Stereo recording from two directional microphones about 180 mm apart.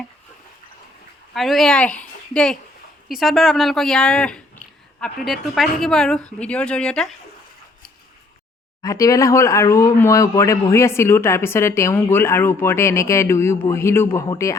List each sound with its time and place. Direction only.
1.3 s a woman's voice: centre (ahead or behind)
8.8 s a woman's voice: 20° left (ahead or behind)